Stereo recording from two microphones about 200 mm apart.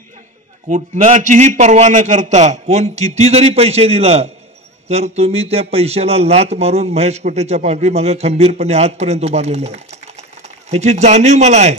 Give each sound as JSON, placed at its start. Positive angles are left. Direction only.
{"t": 0.7, "sound": "speech", "side_deg": -35}